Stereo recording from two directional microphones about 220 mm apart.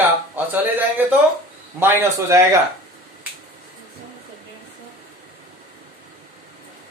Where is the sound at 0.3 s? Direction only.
10° right (ahead or behind).